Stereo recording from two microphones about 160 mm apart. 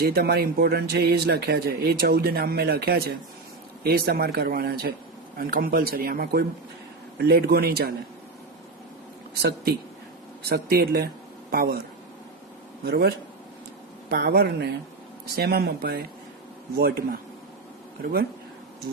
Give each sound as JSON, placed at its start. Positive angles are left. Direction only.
{"t": 0.0, "sound": "speech", "side_deg": -80}
{"t": 7.2, "sound": "speech", "side_deg": -85}
{"t": 9.3, "sound": "speech", "side_deg": -90}
{"t": 10.5, "sound": "speech", "side_deg": -70}
{"t": 12.8, "sound": "speech", "side_deg": -75}